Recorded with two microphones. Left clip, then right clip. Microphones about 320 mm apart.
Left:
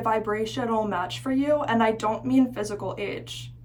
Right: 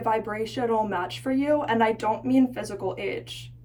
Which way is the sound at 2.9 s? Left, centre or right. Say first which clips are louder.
Right 1 dB; left.